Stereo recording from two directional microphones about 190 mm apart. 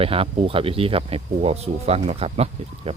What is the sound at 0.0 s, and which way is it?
Speech, 30° right (ahead or behind).